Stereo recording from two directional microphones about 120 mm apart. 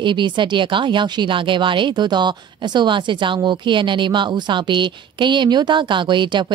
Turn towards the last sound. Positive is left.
turn(degrees=-40)  # may be behind; listen again after turning